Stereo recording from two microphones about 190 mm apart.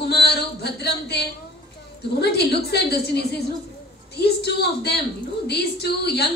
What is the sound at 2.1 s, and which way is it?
Speech, 60° left (ahead or behind).